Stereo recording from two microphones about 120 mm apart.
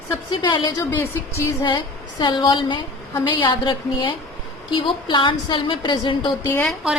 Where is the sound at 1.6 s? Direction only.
40° left (ahead or behind).